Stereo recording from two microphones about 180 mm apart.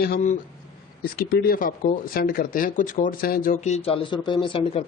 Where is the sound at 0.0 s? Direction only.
55° left (ahead or behind).